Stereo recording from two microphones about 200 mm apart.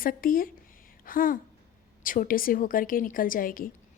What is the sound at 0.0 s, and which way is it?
A woman's voice, 45° left (ahead or behind).